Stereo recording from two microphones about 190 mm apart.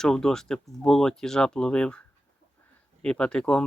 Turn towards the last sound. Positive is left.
turn(degrees=5)  # may be behind; listen again after turning